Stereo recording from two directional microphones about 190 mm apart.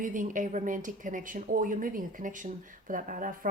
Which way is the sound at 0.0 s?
45° right (ahead or behind).